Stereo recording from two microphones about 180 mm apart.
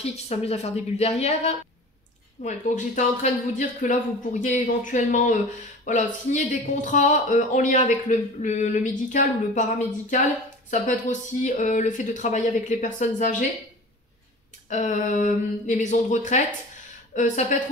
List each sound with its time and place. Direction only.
0.0 s a woman's voice: 35° left (ahead or behind)
14.7 s speech: 40° left (ahead or behind)